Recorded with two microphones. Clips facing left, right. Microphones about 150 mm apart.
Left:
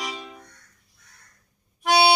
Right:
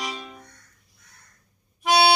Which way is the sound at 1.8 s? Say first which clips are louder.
Even; centre (ahead or behind).